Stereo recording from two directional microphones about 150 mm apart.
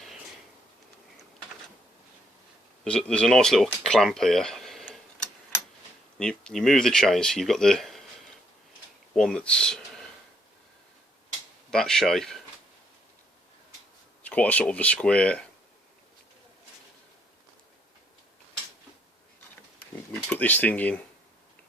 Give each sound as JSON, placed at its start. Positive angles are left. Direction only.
{"t": 2.8, "sound": "speech", "side_deg": 5}
{"t": 9.1, "sound": "speech", "side_deg": 5}
{"t": 11.7, "sound": "speech", "side_deg": 5}
{"t": 14.2, "sound": "speech", "side_deg": 10}
{"t": 20.3, "sound": "speech", "side_deg": 10}